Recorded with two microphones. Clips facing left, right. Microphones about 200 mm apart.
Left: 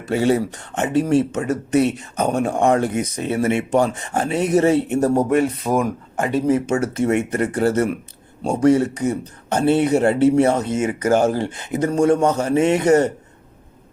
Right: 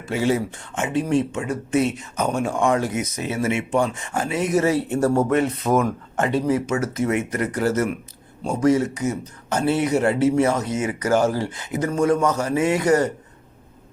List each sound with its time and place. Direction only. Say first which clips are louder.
0.1 s speech: left 4 dB; 35° left (ahead or behind); by 6.4 s 15° left (ahead or behind)
6.5 s speech: left 3 dB; 30° left (ahead or behind)